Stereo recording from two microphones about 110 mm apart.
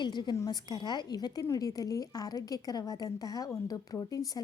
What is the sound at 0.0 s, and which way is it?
A woman's voice, 40° left (ahead or behind).